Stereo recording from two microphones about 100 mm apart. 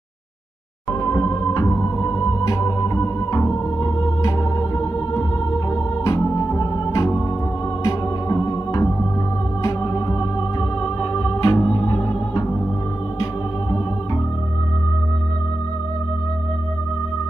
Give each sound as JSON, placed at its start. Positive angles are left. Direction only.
{"t": 1.0, "sound": "music", "side_deg": 40}
{"t": 11.0, "sound": "music", "side_deg": 65}